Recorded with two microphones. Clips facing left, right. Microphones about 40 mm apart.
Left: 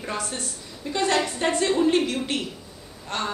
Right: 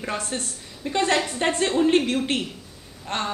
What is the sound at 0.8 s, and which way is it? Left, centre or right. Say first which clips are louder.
Speech: right 1 dB; right.